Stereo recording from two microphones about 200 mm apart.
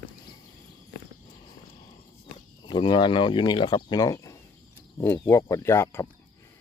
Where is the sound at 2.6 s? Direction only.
20° left (ahead or behind).